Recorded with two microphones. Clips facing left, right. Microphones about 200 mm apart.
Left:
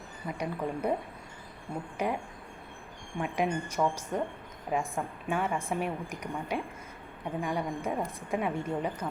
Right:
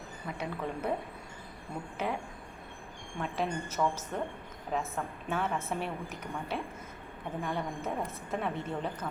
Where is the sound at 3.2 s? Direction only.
15° left (ahead or behind).